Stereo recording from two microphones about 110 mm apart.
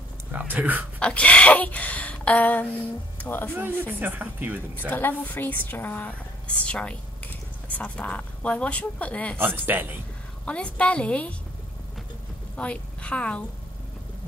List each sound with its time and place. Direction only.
0.3 s speech: 15° right (ahead or behind)
0.9 s a woman's voice: 10° left (ahead or behind)
3.5 s speech: 15° right (ahead or behind)
4.7 s a woman's voice: 15° left (ahead or behind)
9.4 s speech: 20° right (ahead or behind)
10.4 s a woman's voice: 10° left (ahead or behind)
12.5 s a woman's voice: 10° left (ahead or behind)